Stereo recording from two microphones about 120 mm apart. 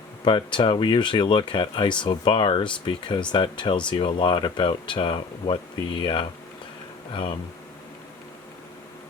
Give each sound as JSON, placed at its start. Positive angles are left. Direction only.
{"t": 0.3, "sound": "speech", "side_deg": 40}